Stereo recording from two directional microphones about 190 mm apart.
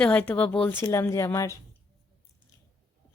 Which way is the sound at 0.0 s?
5° left (ahead or behind).